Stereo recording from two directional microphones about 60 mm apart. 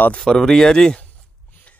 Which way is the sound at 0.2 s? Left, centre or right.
Centre.